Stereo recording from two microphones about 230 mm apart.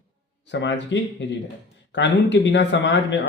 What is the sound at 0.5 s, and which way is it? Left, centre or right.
Speech, left.